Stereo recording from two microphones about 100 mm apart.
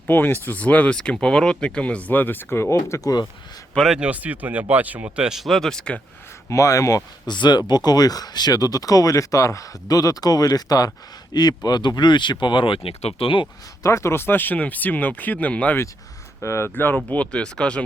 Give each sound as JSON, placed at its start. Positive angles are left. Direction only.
{"t": 0.1, "sound": "speech", "side_deg": 20}
{"t": 3.8, "sound": "speech", "side_deg": -5}
{"t": 6.5, "sound": "speech", "side_deg": 35}
{"t": 7.3, "sound": "speech", "side_deg": 50}
{"t": 13.8, "sound": "speech", "side_deg": 30}
{"t": 16.4, "sound": "speech", "side_deg": 25}